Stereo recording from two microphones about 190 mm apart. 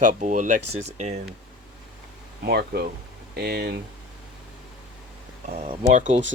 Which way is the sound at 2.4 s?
55° right (ahead or behind).